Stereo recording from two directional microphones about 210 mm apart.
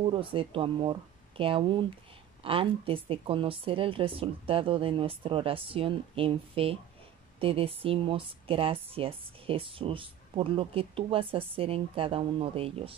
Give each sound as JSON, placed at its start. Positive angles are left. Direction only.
{"t": 0.0, "sound": "speech", "side_deg": -25}